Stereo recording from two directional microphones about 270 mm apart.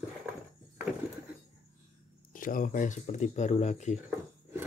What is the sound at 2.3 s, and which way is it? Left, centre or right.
Speech, left.